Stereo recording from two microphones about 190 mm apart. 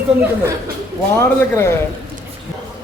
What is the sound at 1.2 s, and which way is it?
Speech, 15° left (ahead or behind).